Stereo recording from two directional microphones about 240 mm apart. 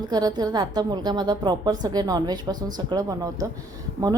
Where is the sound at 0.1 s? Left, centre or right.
Centre.